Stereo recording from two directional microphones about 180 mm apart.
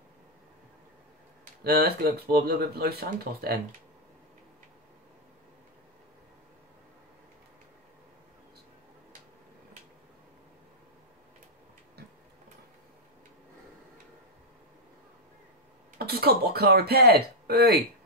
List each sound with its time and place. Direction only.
1.6 s speech: 60° right (ahead or behind)
16.0 s speech: 60° right (ahead or behind)